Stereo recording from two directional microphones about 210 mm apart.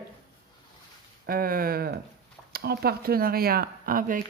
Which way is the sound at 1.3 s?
45° right (ahead or behind).